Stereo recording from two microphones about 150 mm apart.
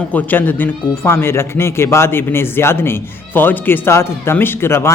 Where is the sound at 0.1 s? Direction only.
10° left (ahead or behind).